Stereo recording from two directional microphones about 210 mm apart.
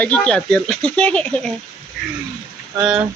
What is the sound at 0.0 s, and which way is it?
Speech, 5° left (ahead or behind).